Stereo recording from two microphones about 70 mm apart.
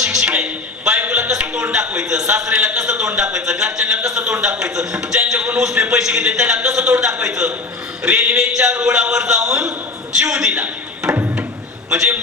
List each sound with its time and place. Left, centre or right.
0.0 s music: centre
2.7 s a man's voice: centre